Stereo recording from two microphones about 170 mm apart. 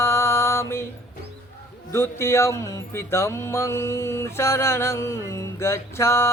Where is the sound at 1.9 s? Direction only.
15° left (ahead or behind).